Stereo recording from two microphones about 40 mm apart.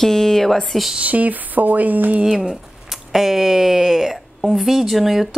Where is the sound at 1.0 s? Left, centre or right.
Right.